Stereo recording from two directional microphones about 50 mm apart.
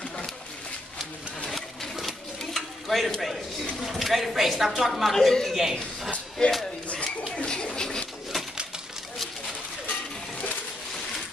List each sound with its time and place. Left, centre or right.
1.5 s sewing machine: centre
3.2 s a woman's voice: centre
5.1 s a man's voice: centre
7.3 s a sound: left